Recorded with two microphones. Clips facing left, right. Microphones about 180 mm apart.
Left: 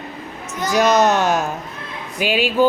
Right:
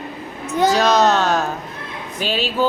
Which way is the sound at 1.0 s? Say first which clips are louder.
Even; 15° left (ahead or behind).